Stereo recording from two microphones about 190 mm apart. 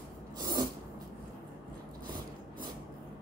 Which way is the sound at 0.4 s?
20° right (ahead or behind).